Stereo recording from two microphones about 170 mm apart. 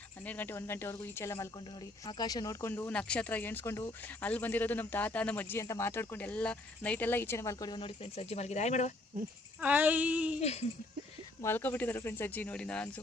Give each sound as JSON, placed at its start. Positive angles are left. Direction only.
{"t": 0.3, "sound": "speech", "side_deg": 10}
{"t": 9.6, "sound": "a sound", "side_deg": -10}
{"t": 10.4, "sound": "speech", "side_deg": 40}
{"t": 11.4, "sound": "speech", "side_deg": 10}